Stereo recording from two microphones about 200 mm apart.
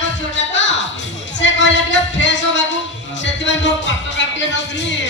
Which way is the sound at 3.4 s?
65° left (ahead or behind).